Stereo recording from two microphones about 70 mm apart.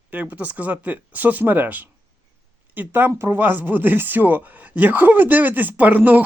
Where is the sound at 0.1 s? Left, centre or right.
Right.